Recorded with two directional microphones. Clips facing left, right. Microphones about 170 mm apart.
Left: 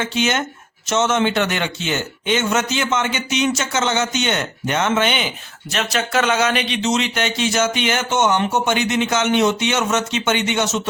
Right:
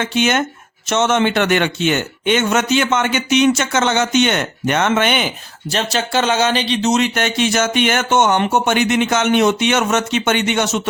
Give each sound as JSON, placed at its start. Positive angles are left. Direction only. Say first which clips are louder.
{"t": 0.0, "sound": "speech", "louder": "right 3 dB", "side_deg": -55}
{"t": 5.7, "sound": "speech", "louder": "right 2 dB", "side_deg": -30}
{"t": 6.8, "sound": "speech", "louder": "right 4 dB", "side_deg": -45}